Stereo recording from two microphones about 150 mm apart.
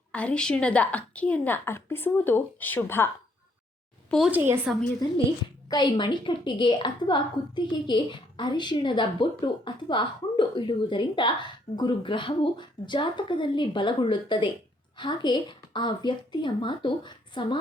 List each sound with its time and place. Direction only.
0.1 s a woman's voice: 10° left (ahead or behind)
4.3 s a woman's voice: 15° right (ahead or behind)
5.6 s a woman's voice: 30° left (ahead or behind)